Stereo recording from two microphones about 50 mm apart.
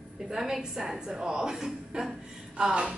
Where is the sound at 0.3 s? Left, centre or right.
Centre.